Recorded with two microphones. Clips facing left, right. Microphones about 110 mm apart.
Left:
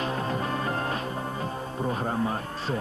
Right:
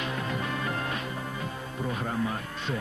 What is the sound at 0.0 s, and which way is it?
Music, 35° left (ahead or behind).